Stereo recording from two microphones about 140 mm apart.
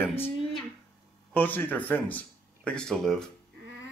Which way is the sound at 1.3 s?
15° left (ahead or behind).